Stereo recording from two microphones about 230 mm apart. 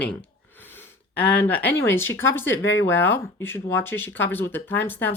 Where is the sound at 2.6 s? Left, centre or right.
Left.